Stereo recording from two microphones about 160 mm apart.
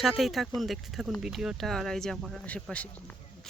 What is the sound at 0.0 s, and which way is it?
Speech, centre (ahead or behind).